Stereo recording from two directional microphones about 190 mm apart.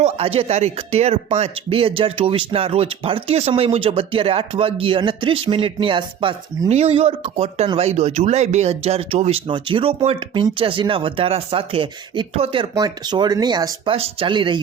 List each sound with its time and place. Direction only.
0.0 s speech: 30° right (ahead or behind)